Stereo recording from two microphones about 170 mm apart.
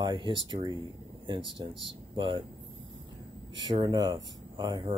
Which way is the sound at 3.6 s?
25° right (ahead or behind).